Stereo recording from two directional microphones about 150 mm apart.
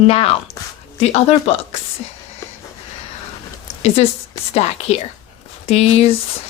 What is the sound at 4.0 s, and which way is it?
Speech, 45° left (ahead or behind).